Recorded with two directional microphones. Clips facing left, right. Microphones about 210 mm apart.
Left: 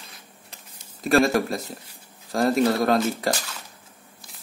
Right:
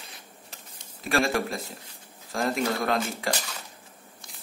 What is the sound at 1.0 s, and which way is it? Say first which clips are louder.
A man's voice: left 6 dB; 40° left (ahead or behind).